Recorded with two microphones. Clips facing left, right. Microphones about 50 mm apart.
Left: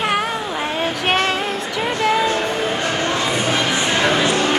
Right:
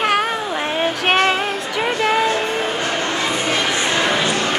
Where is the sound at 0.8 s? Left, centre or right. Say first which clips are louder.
Right 3 dB; centre.